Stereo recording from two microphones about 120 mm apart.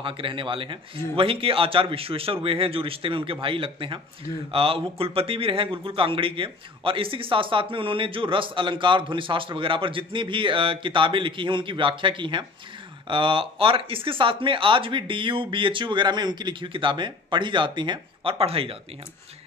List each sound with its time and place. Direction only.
0.0 s a man's voice: 45° right (ahead or behind)